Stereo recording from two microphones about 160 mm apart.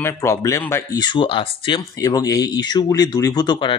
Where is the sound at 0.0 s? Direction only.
15° left (ahead or behind).